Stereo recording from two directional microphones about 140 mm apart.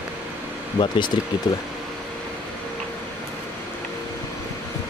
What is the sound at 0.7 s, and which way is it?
Speech, 35° left (ahead or behind).